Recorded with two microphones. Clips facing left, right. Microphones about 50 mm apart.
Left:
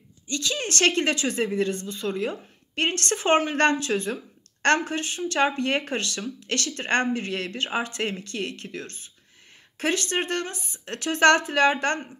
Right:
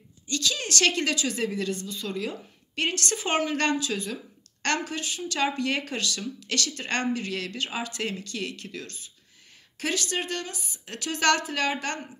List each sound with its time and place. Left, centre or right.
0.3 s a woman's voice: left